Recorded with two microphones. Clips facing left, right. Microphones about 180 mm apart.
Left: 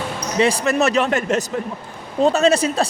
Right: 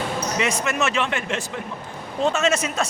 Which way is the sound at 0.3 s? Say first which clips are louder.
Left 9 dB; 35° left (ahead or behind).